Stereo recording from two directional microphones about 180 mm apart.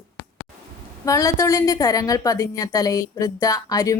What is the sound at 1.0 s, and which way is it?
A woman's voice, 20° left (ahead or behind).